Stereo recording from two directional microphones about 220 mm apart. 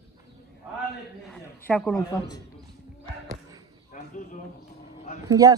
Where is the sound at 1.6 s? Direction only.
5° left (ahead or behind).